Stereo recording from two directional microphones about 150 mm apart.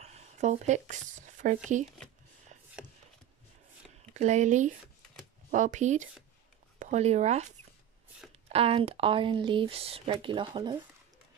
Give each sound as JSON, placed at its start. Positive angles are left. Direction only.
{"t": 0.0, "sound": "speech", "side_deg": -50}
{"t": 4.1, "sound": "speech", "side_deg": -50}